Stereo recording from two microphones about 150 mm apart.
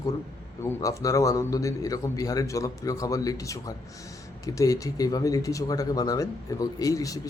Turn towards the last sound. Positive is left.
turn(degrees=25)  # may be behind; listen again after turning